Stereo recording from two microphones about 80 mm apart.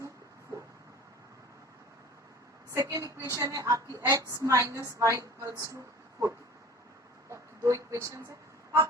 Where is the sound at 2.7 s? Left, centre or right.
Right.